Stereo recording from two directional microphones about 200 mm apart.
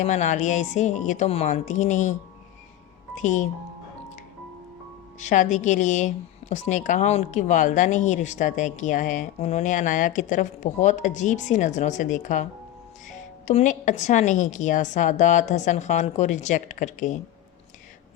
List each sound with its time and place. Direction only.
0.0 s a woman's voice: 35° left (ahead or behind)
3.2 s a woman's voice: 40° left (ahead or behind)
5.2 s a woman's voice: 40° left (ahead or behind)